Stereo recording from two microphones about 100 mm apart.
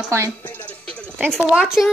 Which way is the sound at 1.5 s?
5° right (ahead or behind).